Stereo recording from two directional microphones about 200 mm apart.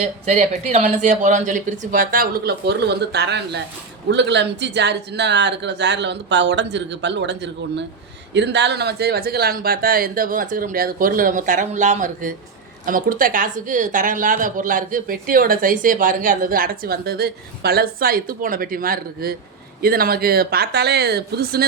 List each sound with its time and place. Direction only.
0.0 s a woman's voice: 35° right (ahead or behind); by 21.6 s 50° right (ahead or behind)